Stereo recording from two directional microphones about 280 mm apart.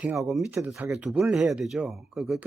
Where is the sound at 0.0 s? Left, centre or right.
Centre.